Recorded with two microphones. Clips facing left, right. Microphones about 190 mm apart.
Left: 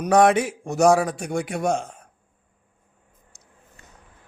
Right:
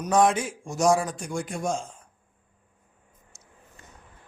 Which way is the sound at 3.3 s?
65° left (ahead or behind).